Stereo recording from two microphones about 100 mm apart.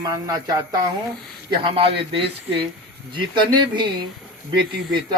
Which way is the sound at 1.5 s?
60° right (ahead or behind).